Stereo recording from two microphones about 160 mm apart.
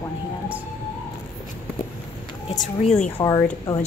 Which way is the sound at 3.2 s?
20° left (ahead or behind).